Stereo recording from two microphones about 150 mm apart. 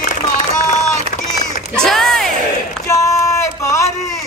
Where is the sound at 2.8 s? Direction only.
20° left (ahead or behind).